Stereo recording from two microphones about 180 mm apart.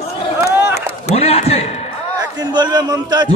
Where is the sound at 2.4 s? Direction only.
20° right (ahead or behind).